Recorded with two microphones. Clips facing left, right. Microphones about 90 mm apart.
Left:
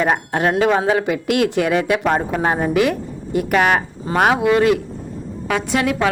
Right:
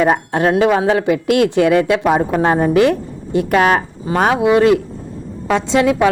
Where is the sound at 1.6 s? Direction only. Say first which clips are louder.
Right 5 dB; 20° left (ahead or behind).